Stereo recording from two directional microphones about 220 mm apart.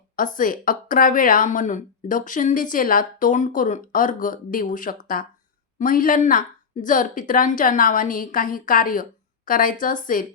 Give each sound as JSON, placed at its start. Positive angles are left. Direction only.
{"t": 0.2, "sound": "speech", "side_deg": 40}